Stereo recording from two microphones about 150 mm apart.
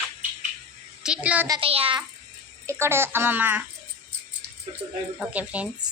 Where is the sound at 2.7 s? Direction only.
15° right (ahead or behind).